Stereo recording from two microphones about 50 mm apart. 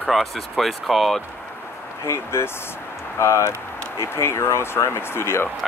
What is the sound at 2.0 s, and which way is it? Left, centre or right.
Speech, left.